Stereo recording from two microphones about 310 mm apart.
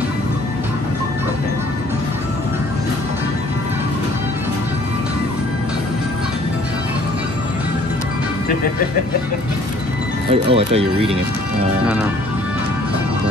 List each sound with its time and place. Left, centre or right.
10.3 s speech: centre